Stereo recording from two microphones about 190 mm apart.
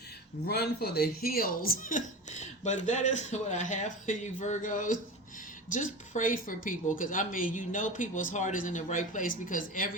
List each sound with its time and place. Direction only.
0.4 s speech: 55° left (ahead or behind)